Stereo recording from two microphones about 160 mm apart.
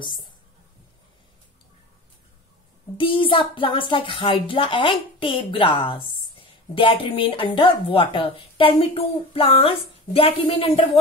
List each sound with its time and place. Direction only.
3.0 s speech: 35° left (ahead or behind)